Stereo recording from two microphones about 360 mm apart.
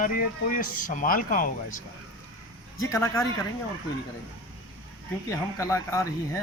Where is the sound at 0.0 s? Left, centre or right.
Left.